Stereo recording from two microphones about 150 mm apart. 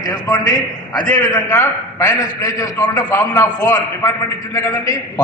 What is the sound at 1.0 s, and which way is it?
A man's voice, 15° left (ahead or behind).